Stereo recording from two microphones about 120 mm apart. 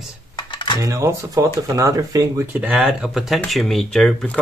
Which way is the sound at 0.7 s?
25° right (ahead or behind).